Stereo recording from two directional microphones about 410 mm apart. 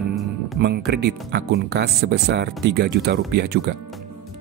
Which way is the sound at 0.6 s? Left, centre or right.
Right.